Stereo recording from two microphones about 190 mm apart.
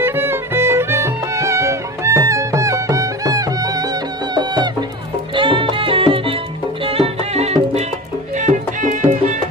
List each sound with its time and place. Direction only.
0.0 s music: 10° right (ahead or behind); by 9.4 s 40° right (ahead or behind)